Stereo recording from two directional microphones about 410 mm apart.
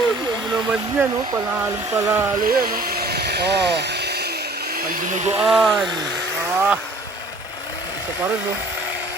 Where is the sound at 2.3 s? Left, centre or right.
Right.